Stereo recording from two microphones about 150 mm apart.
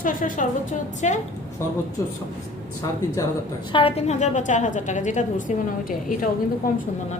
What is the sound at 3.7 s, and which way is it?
A woman's voice, 35° left (ahead or behind).